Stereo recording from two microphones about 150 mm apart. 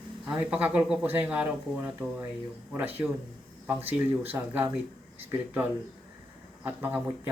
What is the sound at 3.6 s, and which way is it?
Speech, 10° right (ahead or behind).